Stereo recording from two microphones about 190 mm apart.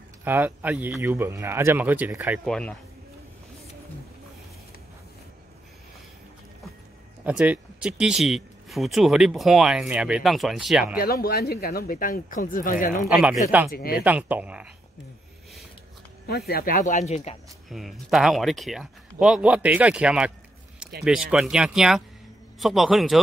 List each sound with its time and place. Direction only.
0.2 s speech: 10° right (ahead or behind)
7.2 s speech: 5° right (ahead or behind)
11.0 s speech: 50° left (ahead or behind)
13.0 s speech: 5° right (ahead or behind)
13.7 s speech: 50° left (ahead or behind)
14.0 s speech: 10° right (ahead or behind)
16.3 s speech: 55° left (ahead or behind); by 17.4 s 35° left (ahead or behind)
17.6 s speech: centre (ahead or behind)